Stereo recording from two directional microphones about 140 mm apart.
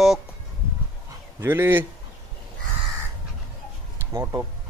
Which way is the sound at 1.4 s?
15° right (ahead or behind).